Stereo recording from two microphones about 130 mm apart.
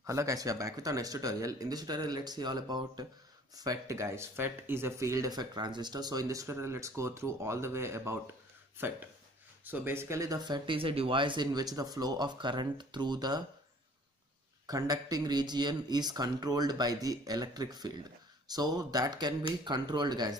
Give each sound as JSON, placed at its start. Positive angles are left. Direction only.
{"t": 0.0, "sound": "speech", "side_deg": -25}
{"t": 9.7, "sound": "speech", "side_deg": -20}
{"t": 14.7, "sound": "speech", "side_deg": -30}